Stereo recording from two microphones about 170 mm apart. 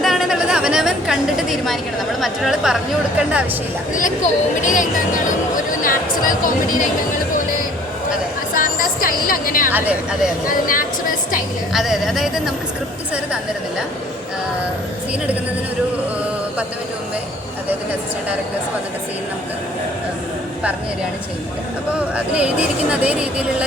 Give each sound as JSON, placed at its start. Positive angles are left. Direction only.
{"t": 0.0, "sound": "chatter", "side_deg": 0}
{"t": 2.2, "sound": "speech", "side_deg": 0}
{"t": 3.9, "sound": "speech", "side_deg": 50}
{"t": 8.5, "sound": "a sound", "side_deg": 55}
{"t": 9.7, "sound": "speech", "side_deg": -10}
{"t": 10.4, "sound": "speech", "side_deg": 55}
{"t": 11.7, "sound": "speech", "side_deg": 0}
{"t": 22.1, "sound": "speech", "side_deg": -5}